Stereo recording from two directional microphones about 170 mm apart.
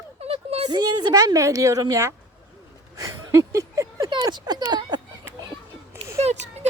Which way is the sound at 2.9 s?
20° right (ahead or behind).